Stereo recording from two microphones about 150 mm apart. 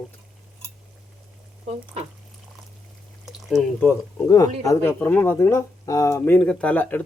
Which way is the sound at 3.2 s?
Centre (ahead or behind).